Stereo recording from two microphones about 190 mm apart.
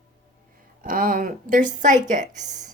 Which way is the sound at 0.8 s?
45° right (ahead or behind).